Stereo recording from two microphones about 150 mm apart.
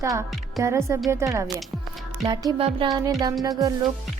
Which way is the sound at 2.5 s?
40° right (ahead or behind).